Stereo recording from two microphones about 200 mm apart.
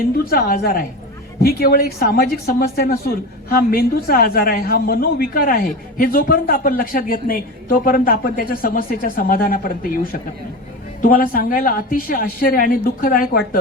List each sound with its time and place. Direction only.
0.3 s a woman's voice: 45° left (ahead or behind)